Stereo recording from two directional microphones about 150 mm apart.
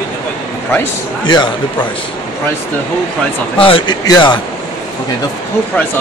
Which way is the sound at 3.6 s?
30° left (ahead or behind).